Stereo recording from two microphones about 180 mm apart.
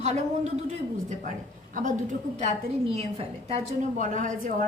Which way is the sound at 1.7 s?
45° right (ahead or behind).